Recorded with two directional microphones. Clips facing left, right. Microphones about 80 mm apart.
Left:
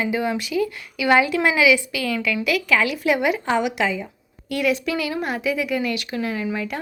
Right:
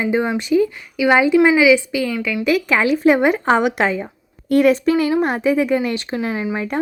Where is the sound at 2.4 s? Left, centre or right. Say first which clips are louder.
Right 5 dB; right.